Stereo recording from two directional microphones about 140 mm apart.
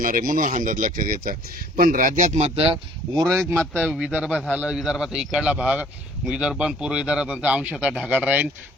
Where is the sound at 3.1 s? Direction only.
25° right (ahead or behind).